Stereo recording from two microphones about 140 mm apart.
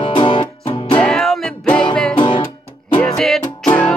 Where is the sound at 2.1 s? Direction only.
40° left (ahead or behind).